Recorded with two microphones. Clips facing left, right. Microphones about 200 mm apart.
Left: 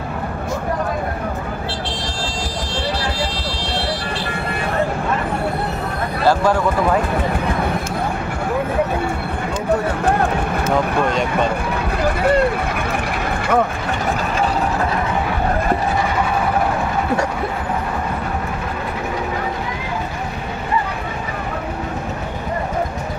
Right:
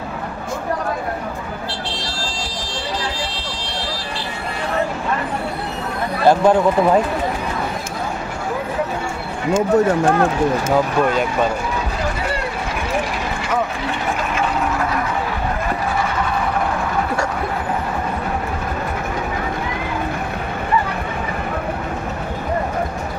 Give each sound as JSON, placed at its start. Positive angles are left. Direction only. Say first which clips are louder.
{"t": 6.2, "sound": "speech", "louder": "right 3 dB", "side_deg": -20}